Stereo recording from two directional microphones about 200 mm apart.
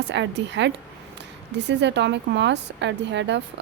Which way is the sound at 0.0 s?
60° right (ahead or behind).